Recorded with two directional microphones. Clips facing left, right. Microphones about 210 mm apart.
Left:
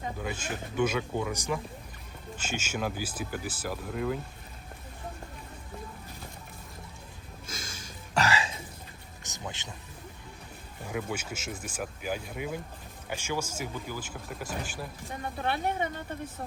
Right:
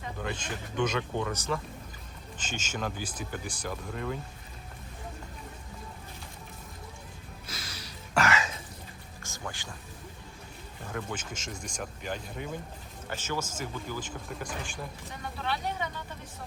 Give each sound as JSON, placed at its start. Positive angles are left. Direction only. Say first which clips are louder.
{"t": 0.2, "sound": "speech", "louder": "left 1 dB", "side_deg": 5}
{"t": 7.4, "sound": "a sound", "louder": "left 2 dB", "side_deg": 45}
{"t": 8.2, "sound": "throat clearing", "louder": "even", "side_deg": 30}
{"t": 9.2, "sound": "speech", "louder": "even", "side_deg": 20}
{"t": 10.8, "sound": "speech", "louder": "left 3 dB", "side_deg": 10}
{"t": 15.4, "sound": "speech", "louder": "left 3 dB", "side_deg": 50}